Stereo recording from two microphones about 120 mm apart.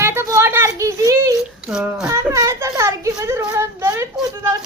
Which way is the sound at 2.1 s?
25° right (ahead or behind).